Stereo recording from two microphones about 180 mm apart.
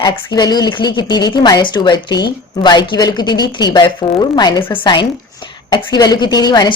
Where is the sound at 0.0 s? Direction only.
20° left (ahead or behind).